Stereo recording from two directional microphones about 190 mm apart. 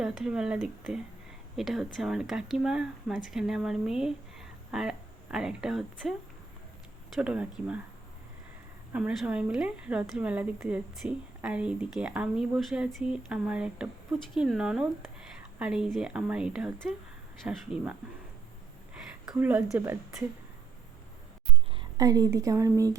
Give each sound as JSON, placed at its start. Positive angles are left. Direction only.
{"t": 0.0, "sound": "speech", "side_deg": -5}
{"t": 7.2, "sound": "speech", "side_deg": -5}
{"t": 8.9, "sound": "speech", "side_deg": -5}
{"t": 19.4, "sound": "a woman's voice", "side_deg": -10}
{"t": 21.7, "sound": "a woman's voice", "side_deg": -20}